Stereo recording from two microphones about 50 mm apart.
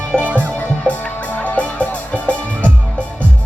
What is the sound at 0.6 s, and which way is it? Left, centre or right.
Music, left.